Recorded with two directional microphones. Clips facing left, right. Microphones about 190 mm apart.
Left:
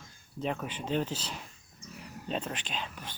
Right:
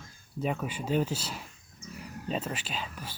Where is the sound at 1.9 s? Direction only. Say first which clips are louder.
Right 2 dB; centre (ahead or behind).